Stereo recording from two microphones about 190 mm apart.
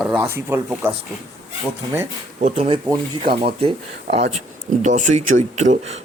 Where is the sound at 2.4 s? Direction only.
35° right (ahead or behind).